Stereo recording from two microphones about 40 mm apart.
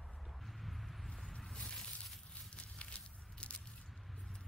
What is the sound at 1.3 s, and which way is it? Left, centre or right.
Squish, left.